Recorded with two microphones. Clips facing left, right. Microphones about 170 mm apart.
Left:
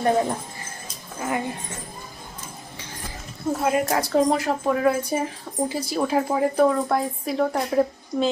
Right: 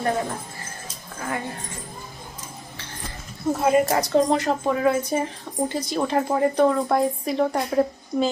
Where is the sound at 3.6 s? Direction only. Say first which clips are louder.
Right 3 dB; centre (ahead or behind).